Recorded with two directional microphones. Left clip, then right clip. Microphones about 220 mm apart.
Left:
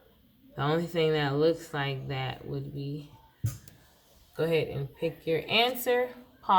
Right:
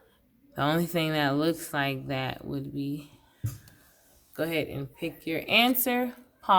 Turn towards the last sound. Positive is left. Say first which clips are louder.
# right 2 dB
turn(degrees=-50)  # may be behind; listen again after turning